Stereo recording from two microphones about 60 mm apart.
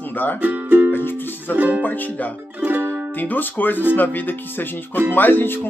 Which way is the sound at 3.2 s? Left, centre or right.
Left.